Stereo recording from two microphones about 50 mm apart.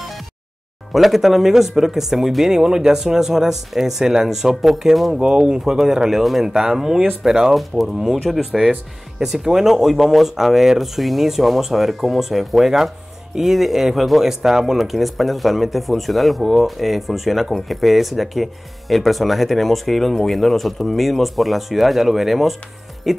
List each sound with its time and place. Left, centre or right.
0.9 s speech: centre
5.2 s speech: centre